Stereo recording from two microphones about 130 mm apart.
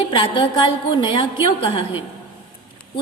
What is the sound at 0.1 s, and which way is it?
A woman's voice, 35° left (ahead or behind).